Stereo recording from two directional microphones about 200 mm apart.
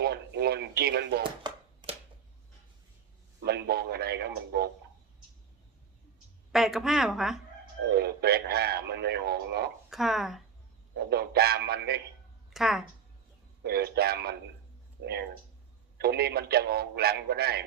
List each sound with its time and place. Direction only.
0.0 s radio: 55° right (ahead or behind)
1.2 s hands: 25° right (ahead or behind)
3.4 s radio: 55° right (ahead or behind)
6.5 s a woman's voice: centre (ahead or behind)
7.9 s radio: 55° right (ahead or behind)
9.9 s a woman's voice: centre (ahead or behind)
10.9 s a man's voice: 55° right (ahead or behind)
12.5 s speech: centre (ahead or behind)
13.7 s a man's voice: 55° right (ahead or behind)
16.0 s a man's voice: 55° right (ahead or behind)